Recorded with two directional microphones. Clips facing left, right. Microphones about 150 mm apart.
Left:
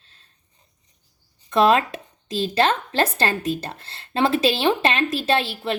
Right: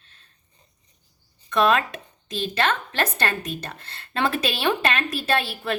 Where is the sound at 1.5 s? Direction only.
30° left (ahead or behind).